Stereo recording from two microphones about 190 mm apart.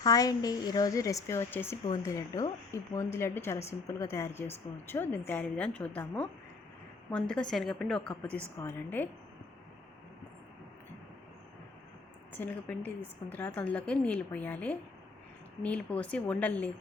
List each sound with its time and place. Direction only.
0.0 s a woman's voice: 20° left (ahead or behind)
12.4 s a woman's voice: 10° left (ahead or behind)